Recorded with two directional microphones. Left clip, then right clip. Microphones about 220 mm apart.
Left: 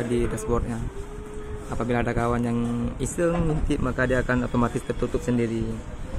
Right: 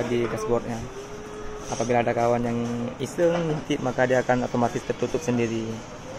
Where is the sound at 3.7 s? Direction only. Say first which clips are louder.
Right 3 dB; 35° left (ahead or behind).